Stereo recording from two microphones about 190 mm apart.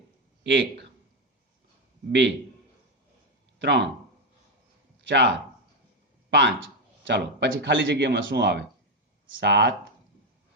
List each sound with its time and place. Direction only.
0.4 s speech: 70° right (ahead or behind)
3.6 s speech: 65° right (ahead or behind)
4.9 s a sound: 70° right (ahead or behind)
6.3 s speech: 65° right (ahead or behind)